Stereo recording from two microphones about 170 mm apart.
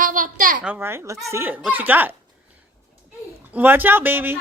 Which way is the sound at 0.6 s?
10° right (ahead or behind).